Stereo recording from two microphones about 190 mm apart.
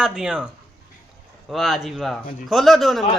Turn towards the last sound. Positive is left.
turn(degrees=0)  # may be behind; listen again after turning